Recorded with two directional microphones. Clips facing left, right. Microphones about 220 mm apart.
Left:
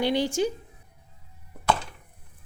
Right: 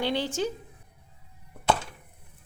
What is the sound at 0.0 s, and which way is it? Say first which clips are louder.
Speech: left 4 dB; 15° left (ahead or behind).